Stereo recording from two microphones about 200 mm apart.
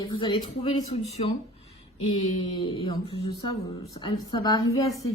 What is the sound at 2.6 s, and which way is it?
A woman's voice, 25° left (ahead or behind).